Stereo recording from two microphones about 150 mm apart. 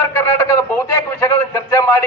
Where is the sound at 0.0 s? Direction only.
15° left (ahead or behind).